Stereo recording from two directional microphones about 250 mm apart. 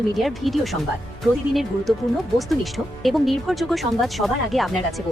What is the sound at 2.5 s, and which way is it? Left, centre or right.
Speech, centre.